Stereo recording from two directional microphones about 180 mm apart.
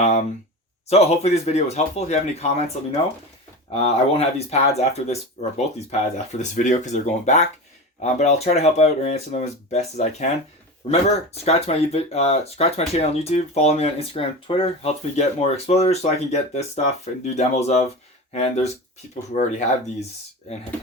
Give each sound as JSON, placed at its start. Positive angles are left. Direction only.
{"t": 0.0, "sound": "a sound", "side_deg": 35}
{"t": 0.9, "sound": "speech", "side_deg": 35}
{"t": 3.7, "sound": "speech", "side_deg": 35}